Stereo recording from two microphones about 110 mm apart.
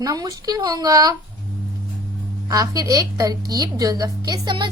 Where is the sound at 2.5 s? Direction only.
35° right (ahead or behind).